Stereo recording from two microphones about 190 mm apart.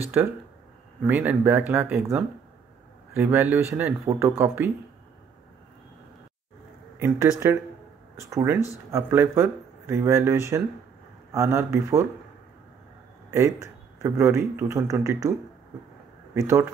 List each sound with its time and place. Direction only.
0.0 s a man's voice: 10° right (ahead or behind)
7.0 s a man's voice: 15° right (ahead or behind)
13.3 s a man's voice: 15° right (ahead or behind)
16.3 s a man's voice: 15° right (ahead or behind)